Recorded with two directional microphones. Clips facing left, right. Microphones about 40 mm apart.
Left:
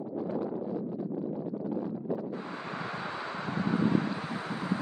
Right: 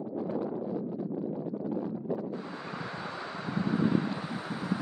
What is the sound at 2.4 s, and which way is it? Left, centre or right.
Wind noise, left.